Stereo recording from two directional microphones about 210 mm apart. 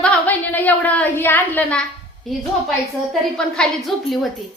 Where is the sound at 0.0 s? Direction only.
10° left (ahead or behind).